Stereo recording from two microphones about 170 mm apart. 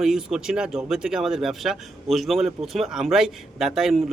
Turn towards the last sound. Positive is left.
turn(degrees=0)  # may be behind; listen again after turning